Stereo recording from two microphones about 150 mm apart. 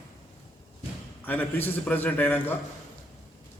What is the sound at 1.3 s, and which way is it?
A man's voice, 10° left (ahead or behind).